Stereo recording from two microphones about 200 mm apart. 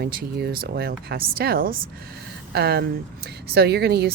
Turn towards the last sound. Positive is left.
turn(degrees=-55)  # may be behind; listen again after turning